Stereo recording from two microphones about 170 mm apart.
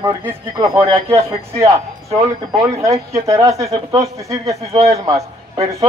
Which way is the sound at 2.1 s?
20° right (ahead or behind).